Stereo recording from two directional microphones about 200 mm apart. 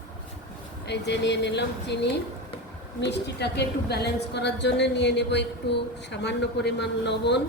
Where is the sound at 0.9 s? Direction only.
60° left (ahead or behind).